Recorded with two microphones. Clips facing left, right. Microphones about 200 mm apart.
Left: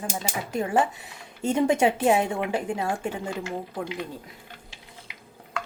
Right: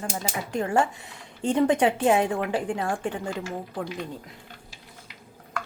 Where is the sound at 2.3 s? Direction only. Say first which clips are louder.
Right 1 dB; 20° left (ahead or behind).